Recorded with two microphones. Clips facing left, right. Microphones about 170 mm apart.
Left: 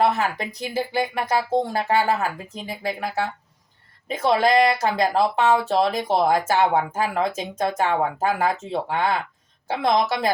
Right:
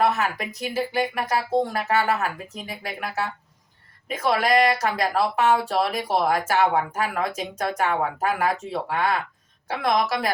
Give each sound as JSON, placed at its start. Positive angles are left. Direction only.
{"t": 0.0, "sound": "speech", "side_deg": 30}